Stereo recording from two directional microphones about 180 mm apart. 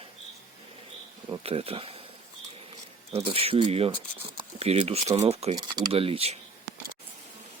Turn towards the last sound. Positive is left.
turn(degrees=-35)  # may be behind; listen again after turning